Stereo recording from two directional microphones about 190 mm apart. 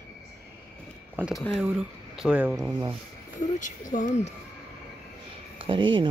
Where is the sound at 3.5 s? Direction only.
40° left (ahead or behind).